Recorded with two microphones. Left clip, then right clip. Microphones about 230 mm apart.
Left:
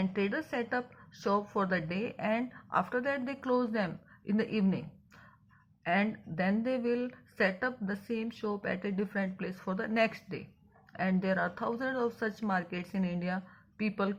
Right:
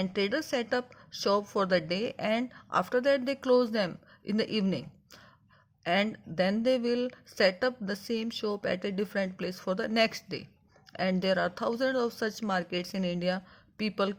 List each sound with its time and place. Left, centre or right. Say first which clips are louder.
0.0 s a woman's voice: right 3 dB; right